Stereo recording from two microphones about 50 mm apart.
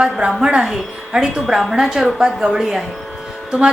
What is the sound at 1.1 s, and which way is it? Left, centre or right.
A woman's voice, centre.